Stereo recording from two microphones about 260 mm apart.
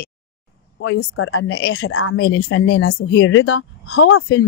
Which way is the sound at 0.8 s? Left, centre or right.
Left.